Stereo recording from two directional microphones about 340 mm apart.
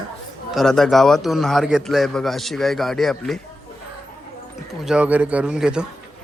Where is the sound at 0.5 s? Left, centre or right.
Centre.